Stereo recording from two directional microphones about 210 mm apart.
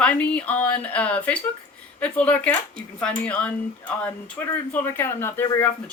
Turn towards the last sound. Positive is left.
turn(degrees=10)  # may be behind; listen again after turning